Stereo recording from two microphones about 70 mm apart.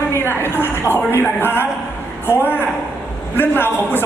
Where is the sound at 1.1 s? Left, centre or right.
Left.